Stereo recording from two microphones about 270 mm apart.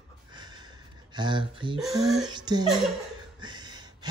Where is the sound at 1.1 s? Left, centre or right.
Centre.